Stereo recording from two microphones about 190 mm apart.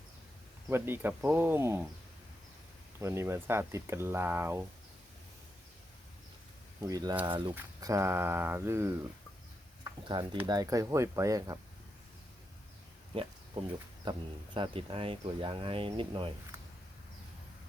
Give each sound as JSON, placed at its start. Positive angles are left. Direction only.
{"t": 0.7, "sound": "speech", "side_deg": -10}
{"t": 3.0, "sound": "speech", "side_deg": -15}
{"t": 6.8, "sound": "speech", "side_deg": -20}
{"t": 9.8, "sound": "a sound", "side_deg": -25}
{"t": 10.4, "sound": "speech", "side_deg": -20}
{"t": 13.1, "sound": "speech", "side_deg": -30}